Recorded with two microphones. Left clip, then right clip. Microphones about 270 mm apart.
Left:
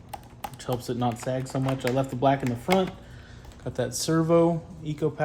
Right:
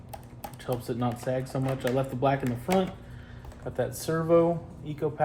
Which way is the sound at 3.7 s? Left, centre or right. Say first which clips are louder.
Left 2 dB; left.